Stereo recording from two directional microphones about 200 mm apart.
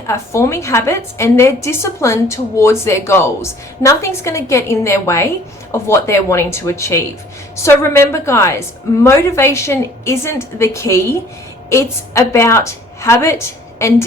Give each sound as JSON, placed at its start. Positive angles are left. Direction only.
{"t": 0.1, "sound": "a woman's voice", "side_deg": 15}